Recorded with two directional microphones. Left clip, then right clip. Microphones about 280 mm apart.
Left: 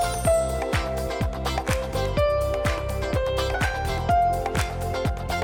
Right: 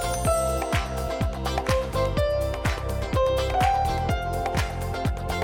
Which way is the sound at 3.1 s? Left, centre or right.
Centre.